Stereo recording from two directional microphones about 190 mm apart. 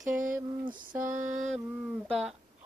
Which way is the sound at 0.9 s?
15° right (ahead or behind).